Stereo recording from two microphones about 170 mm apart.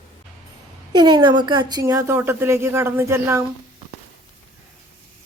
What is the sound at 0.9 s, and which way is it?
Speech, 25° right (ahead or behind).